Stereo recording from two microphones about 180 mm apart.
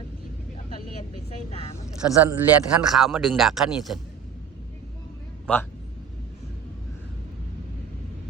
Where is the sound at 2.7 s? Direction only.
5° right (ahead or behind).